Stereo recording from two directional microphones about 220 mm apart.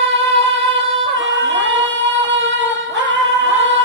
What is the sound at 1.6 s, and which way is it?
Singing, 55° right (ahead or behind).